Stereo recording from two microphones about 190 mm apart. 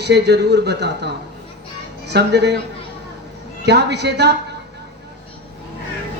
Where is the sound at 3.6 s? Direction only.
60° right (ahead or behind).